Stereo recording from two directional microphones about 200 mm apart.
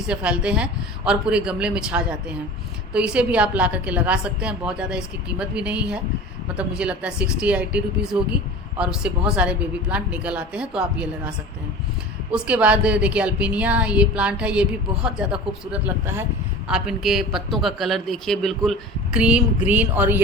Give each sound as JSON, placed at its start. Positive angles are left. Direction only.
{"t": 0.1, "sound": "a woman's voice", "side_deg": -5}
{"t": 12.3, "sound": "a woman's voice", "side_deg": -5}